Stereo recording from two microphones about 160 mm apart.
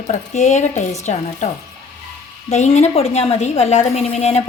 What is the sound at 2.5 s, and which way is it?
A woman's voice, 45° left (ahead or behind).